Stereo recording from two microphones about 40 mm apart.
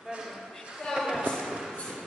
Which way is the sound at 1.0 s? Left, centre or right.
Centre.